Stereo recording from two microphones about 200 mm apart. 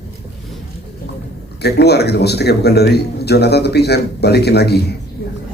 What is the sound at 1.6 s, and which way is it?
A man's voice, 55° left (ahead or behind).